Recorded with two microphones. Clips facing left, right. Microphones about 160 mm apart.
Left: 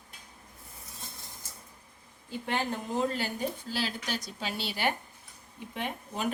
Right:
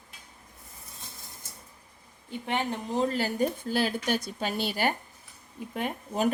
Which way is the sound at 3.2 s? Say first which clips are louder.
Right 6 dB; 45° right (ahead or behind).